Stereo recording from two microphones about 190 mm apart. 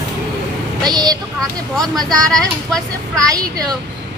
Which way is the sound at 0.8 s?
20° right (ahead or behind).